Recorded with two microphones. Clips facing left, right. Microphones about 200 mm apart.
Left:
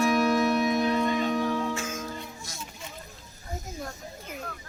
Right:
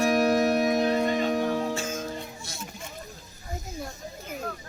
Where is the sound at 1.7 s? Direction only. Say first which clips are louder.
Right 2 dB; 25° right (ahead or behind).